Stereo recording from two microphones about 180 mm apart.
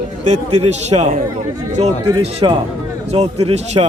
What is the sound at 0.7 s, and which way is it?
Speech, 40° right (ahead or behind).